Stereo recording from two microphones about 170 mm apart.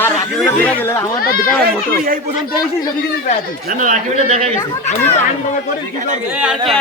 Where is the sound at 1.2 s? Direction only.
60° left (ahead or behind).